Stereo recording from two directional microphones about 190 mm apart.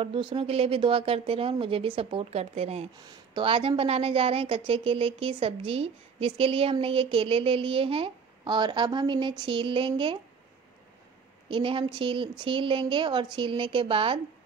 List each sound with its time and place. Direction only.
0.0 s a woman's voice: 30° right (ahead or behind)
11.4 s a woman's voice: 25° right (ahead or behind)